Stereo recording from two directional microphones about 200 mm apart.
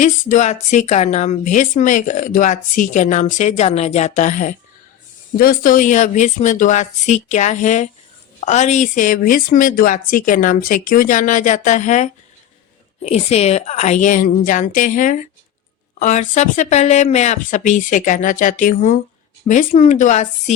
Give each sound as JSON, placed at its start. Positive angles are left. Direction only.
{"t": 0.0, "sound": "speech", "side_deg": 35}